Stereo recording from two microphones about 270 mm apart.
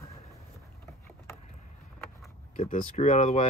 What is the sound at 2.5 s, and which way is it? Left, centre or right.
Speech, left.